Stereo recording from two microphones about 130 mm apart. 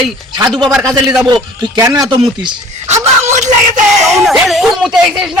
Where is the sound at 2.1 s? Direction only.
35° right (ahead or behind).